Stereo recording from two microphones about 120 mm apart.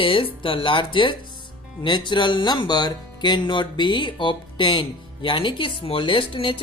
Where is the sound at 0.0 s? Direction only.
45° left (ahead or behind).